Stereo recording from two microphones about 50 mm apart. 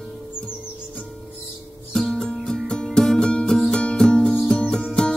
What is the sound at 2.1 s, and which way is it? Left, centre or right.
Music, centre.